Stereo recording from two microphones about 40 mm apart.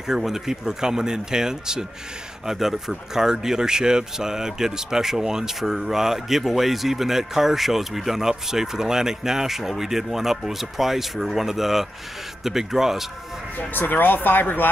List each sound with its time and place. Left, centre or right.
0.0 s speech: centre
13.6 s speech: left